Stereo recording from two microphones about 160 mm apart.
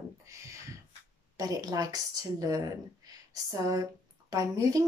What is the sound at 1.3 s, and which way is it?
A woman's voice, 25° right (ahead or behind).